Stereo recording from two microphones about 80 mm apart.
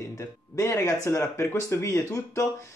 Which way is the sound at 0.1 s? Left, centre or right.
Left.